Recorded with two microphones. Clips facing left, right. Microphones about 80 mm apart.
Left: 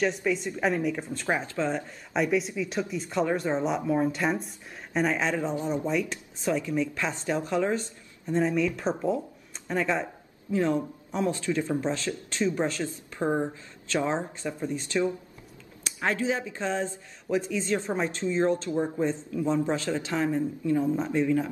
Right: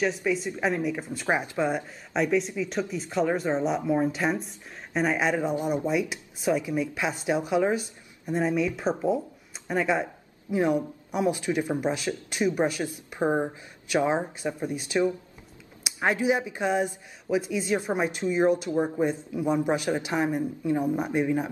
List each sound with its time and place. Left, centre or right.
0.0 s speech: centre
2.1 s speech: centre